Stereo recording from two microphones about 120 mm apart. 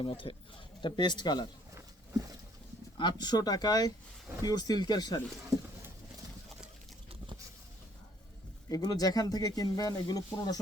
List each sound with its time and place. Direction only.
0.0 s speech: 45° left (ahead or behind)
3.0 s speech: 35° left (ahead or behind)
8.7 s speech: 30° left (ahead or behind)